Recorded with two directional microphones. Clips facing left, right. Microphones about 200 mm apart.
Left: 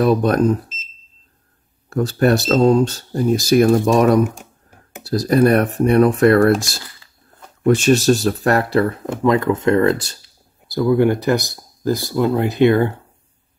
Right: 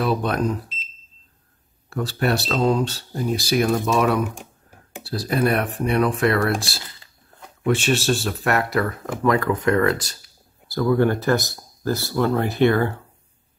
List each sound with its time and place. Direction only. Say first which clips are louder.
0.0 s speech: left 7 dB; 45° left (ahead or behind)
1.9 s speech: left 7 dB; 45° left (ahead or behind); by 10.1 s 30° left (ahead or behind)
10.7 s speech: left 4 dB; 15° left (ahead or behind)